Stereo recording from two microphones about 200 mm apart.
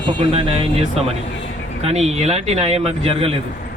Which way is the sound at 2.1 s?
35° right (ahead or behind).